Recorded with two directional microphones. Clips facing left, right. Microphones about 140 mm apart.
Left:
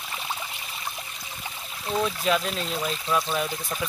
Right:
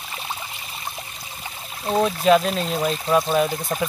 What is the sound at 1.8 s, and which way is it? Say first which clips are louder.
Speech: right 7 dB; 45° right (ahead or behind).